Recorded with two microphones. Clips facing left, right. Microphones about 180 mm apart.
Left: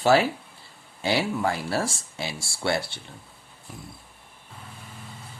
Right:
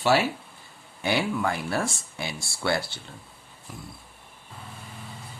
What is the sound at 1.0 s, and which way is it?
Speech, 25° left (ahead or behind).